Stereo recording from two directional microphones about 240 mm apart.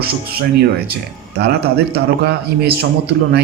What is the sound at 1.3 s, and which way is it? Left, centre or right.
Speech, right.